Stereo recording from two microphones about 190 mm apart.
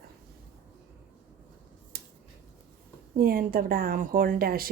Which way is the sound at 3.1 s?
50° right (ahead or behind).